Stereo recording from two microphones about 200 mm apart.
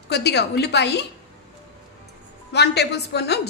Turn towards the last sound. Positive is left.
turn(degrees=55)  # may be behind; listen again after turning